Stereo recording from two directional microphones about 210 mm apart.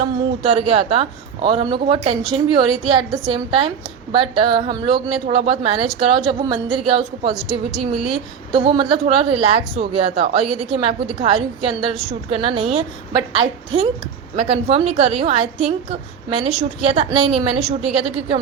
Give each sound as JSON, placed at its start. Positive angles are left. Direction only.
{"t": 0.0, "sound": "a woman's voice", "side_deg": -25}
{"t": 8.5, "sound": "a woman's voice", "side_deg": -25}